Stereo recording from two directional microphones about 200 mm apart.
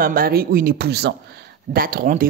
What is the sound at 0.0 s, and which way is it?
Speech, 45° right (ahead or behind).